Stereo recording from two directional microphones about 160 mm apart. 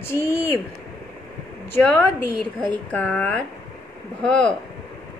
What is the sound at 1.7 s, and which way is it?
A woman's voice, 15° left (ahead or behind).